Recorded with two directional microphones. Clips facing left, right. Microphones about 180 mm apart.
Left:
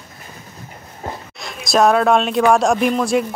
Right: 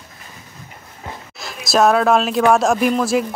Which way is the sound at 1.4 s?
Centre (ahead or behind).